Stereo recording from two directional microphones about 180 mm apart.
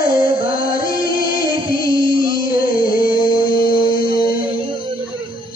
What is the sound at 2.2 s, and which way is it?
Music, 55° left (ahead or behind).